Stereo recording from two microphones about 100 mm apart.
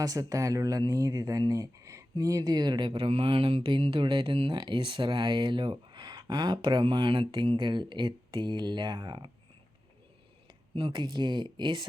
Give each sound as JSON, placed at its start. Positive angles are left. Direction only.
{"t": 0.0, "sound": "speech", "side_deg": -35}
{"t": 10.8, "sound": "speech", "side_deg": -55}